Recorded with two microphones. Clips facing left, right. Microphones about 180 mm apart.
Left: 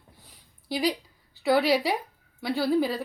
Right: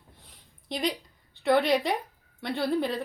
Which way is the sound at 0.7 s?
5° left (ahead or behind).